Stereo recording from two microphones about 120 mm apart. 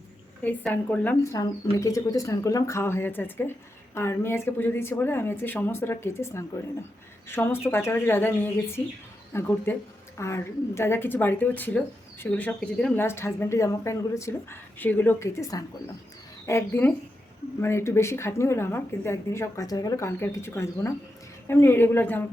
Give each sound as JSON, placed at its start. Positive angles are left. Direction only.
{"t": 0.4, "sound": "speech", "side_deg": 15}
{"t": 1.2, "sound": "speech", "side_deg": 25}
{"t": 20.1, "sound": "speech", "side_deg": 20}